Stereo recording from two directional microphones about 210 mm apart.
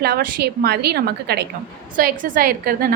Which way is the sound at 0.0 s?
50° right (ahead or behind).